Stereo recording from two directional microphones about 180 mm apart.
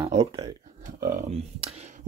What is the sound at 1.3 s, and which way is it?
Speech, 35° right (ahead or behind).